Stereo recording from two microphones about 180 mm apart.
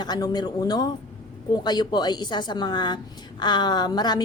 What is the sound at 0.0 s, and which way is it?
A woman's voice, 25° left (ahead or behind).